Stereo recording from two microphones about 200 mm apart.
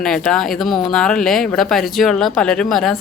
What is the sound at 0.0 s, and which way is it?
Speech, 5° left (ahead or behind).